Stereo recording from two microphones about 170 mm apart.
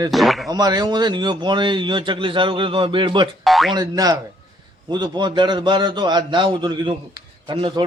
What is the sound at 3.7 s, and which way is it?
A man's voice, 20° right (ahead or behind).